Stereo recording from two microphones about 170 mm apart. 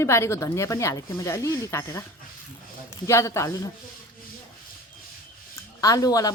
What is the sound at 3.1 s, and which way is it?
Speech, 15° left (ahead or behind).